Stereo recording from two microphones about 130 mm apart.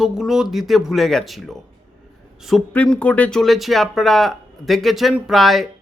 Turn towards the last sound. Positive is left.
turn(degrees=0)  # may be behind; listen again after turning